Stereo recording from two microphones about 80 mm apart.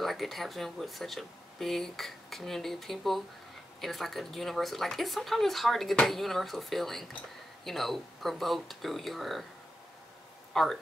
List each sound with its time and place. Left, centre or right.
0.0 s speech: centre
10.5 s speech: centre